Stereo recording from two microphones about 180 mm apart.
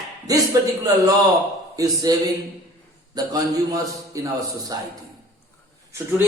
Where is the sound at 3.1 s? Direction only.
20° right (ahead or behind).